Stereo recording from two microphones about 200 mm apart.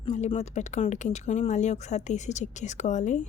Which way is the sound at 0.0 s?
30° left (ahead or behind).